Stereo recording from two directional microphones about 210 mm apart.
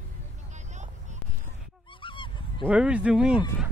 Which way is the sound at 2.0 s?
25° left (ahead or behind).